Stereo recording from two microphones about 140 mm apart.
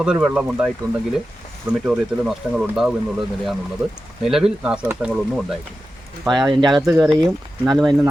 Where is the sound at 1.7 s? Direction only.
5° right (ahead or behind).